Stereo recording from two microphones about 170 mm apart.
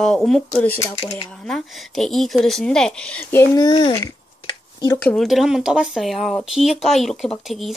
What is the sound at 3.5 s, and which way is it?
Speech, 25° left (ahead or behind).